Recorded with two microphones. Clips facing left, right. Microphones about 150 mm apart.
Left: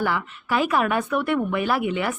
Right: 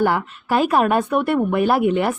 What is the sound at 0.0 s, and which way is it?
Speech, 50° right (ahead or behind).